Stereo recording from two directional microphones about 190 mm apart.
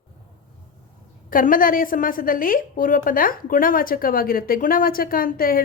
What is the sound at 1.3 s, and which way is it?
A woman's voice, 45° left (ahead or behind).